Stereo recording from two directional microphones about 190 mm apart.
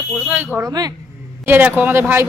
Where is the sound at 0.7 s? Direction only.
20° right (ahead or behind).